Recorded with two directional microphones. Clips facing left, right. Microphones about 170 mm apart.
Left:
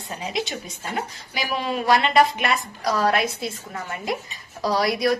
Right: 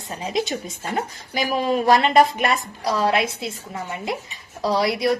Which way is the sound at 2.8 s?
25° right (ahead or behind).